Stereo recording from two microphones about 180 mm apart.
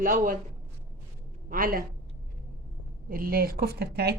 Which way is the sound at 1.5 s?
50° right (ahead or behind).